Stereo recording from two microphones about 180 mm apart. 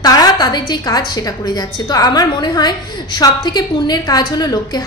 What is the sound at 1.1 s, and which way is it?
A woman's voice, 20° left (ahead or behind).